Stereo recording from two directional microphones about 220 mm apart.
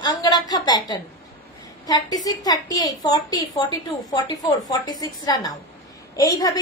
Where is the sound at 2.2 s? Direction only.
15° left (ahead or behind).